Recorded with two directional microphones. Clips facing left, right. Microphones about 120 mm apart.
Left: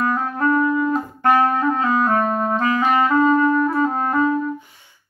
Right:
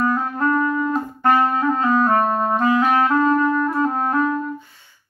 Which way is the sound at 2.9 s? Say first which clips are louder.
Left 1 dB; 5° left (ahead or behind).